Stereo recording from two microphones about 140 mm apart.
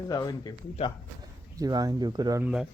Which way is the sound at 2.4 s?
5° right (ahead or behind).